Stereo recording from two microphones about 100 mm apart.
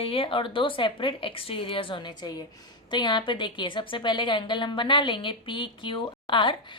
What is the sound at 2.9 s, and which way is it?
A woman's voice, 50° left (ahead or behind).